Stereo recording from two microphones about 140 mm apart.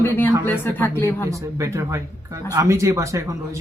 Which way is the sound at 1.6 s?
20° right (ahead or behind).